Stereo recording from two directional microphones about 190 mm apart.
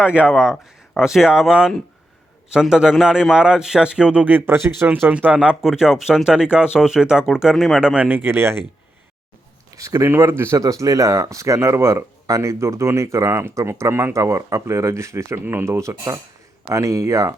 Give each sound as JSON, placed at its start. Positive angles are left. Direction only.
{"t": 0.0, "sound": "a man's voice", "side_deg": -5}
{"t": 9.7, "sound": "speech", "side_deg": -15}